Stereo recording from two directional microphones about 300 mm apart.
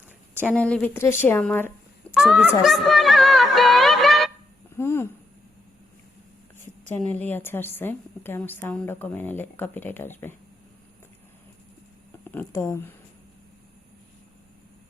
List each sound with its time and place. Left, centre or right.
0.3 s a woman's voice: centre
2.1 s music: centre
4.8 s a sound: centre
7.1 s a woman's voice: centre
12.2 s speech: centre